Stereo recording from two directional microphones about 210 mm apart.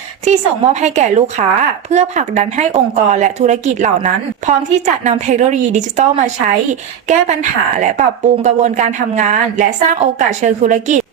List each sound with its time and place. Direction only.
0.3 s a woman's voice: 35° right (ahead or behind)